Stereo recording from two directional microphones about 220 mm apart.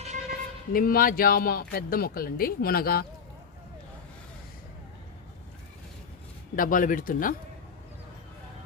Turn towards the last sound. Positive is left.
turn(degrees=40)  # may be behind; listen again after turning